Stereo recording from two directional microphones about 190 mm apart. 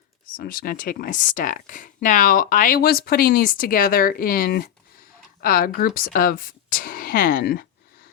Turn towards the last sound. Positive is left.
turn(degrees=55)  # may be behind; listen again after turning